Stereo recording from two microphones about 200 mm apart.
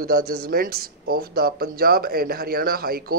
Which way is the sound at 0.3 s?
50° right (ahead or behind).